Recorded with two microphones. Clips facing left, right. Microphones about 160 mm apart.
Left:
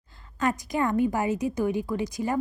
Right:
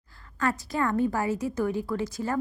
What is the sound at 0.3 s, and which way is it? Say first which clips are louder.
A woman's voice: left 2 dB; 15° left (ahead or behind).